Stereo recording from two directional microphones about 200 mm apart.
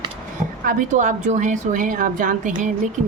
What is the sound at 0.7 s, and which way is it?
A woman's voice, 40° right (ahead or behind).